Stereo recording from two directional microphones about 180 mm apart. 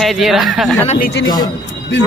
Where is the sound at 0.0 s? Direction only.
Centre (ahead or behind).